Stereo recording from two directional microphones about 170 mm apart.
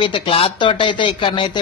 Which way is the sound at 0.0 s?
30° left (ahead or behind).